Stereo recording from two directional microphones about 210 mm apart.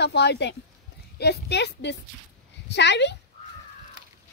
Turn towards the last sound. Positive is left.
turn(degrees=55)  # may be behind; listen again after turning